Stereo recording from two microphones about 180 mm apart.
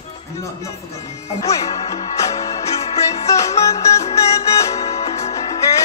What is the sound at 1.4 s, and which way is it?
Music, 20° left (ahead or behind).